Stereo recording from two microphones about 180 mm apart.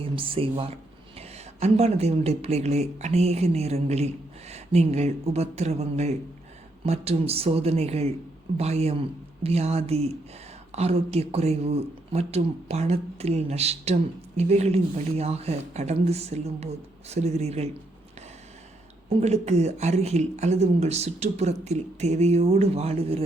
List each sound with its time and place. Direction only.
0.0 s a woman's voice: 30° right (ahead or behind)
19.0 s a woman's voice: 35° right (ahead or behind)